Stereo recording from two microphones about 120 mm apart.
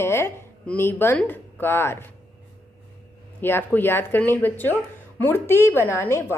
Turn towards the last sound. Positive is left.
turn(degrees=20)  # may be behind; listen again after turning